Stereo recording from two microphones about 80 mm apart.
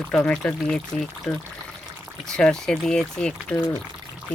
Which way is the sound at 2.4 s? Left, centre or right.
Centre.